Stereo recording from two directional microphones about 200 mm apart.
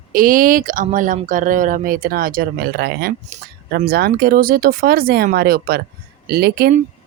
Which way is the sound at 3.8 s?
50° right (ahead or behind).